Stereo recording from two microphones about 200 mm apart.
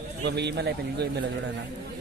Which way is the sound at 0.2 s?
55° right (ahead or behind).